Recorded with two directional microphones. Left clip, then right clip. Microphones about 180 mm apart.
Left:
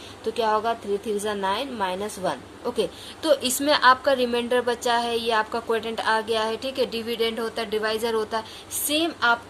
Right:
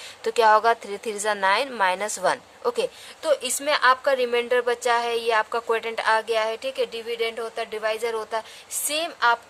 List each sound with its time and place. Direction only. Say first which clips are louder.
0.3 s a woman's voice: right 6 dB; 55° right (ahead or behind)
8.9 s a woman's voice: even; 55° right (ahead or behind)